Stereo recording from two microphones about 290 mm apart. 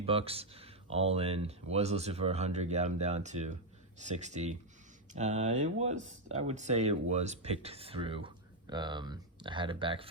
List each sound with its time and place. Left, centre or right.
0.0 s speech: centre